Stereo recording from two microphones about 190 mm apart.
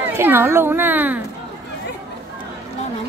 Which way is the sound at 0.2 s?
10° right (ahead or behind).